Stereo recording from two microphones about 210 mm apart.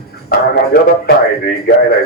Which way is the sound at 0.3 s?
45° left (ahead or behind).